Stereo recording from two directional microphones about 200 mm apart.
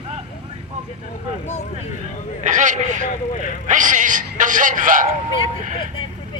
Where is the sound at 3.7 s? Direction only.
40° right (ahead or behind).